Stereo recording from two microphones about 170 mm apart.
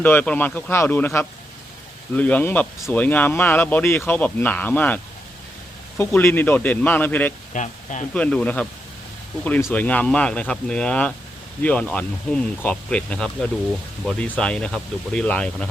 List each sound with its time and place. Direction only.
0.0 s speech: 10° left (ahead or behind)
6.0 s speech: 15° left (ahead or behind)
7.5 s speech: 45° left (ahead or behind)
8.1 s speech: 5° left (ahead or behind)